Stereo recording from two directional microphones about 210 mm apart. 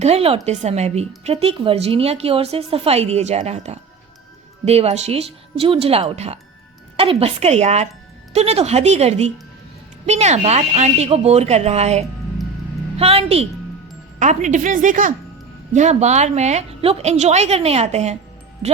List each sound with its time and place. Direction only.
0.0 s a woman's voice: 30° right (ahead or behind)